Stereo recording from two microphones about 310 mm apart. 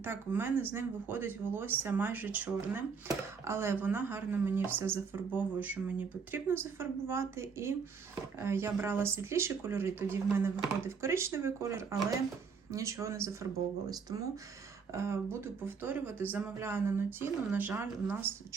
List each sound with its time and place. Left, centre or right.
0.0 s speech: centre